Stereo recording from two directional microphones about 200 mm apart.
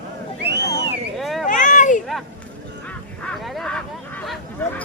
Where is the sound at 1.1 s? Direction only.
Centre (ahead or behind).